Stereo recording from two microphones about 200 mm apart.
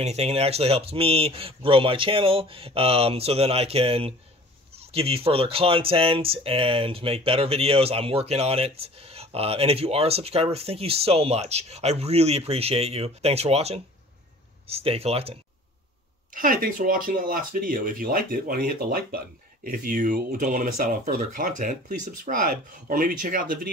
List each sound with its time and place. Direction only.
0.0 s speech: 35° right (ahead or behind)
16.3 s speech: 45° right (ahead or behind)